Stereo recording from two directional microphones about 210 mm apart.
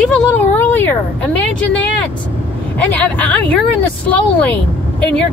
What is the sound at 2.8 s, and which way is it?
Speech, 5° left (ahead or behind).